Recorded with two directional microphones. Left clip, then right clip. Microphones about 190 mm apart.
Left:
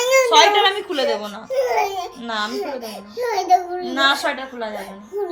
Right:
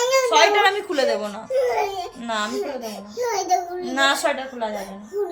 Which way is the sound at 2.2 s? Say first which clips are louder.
Even; 15° right (ahead or behind).